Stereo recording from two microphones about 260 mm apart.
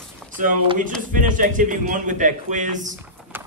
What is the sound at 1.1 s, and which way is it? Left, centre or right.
A man's voice, right.